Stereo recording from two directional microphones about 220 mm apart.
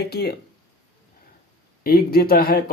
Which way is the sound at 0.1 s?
45° left (ahead or behind).